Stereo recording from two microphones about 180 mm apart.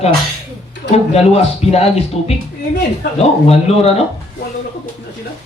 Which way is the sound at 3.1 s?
35° left (ahead or behind).